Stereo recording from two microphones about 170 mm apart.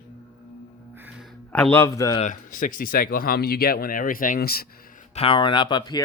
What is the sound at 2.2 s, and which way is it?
Speech, 50° left (ahead or behind).